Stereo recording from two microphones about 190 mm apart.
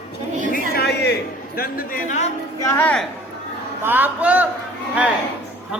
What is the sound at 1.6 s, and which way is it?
Speech, 50° left (ahead or behind).